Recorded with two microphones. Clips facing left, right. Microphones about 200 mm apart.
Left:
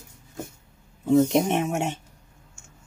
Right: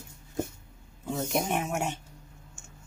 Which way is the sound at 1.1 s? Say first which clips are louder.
Left 10 dB; 25° left (ahead or behind).